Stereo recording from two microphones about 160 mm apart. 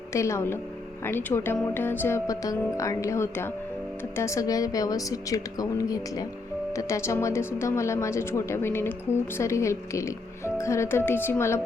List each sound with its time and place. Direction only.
0.1 s a woman's voice: 15° left (ahead or behind)